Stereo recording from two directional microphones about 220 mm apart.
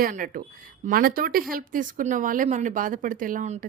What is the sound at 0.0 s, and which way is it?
A woman's voice, 40° right (ahead or behind).